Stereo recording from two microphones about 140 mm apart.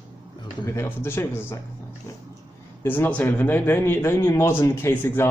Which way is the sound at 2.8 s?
15° left (ahead or behind).